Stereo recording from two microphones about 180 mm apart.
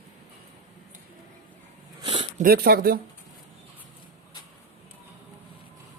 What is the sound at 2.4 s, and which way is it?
Speech, 55° right (ahead or behind).